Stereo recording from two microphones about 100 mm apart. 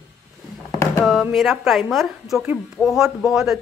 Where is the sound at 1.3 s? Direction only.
Centre (ahead or behind).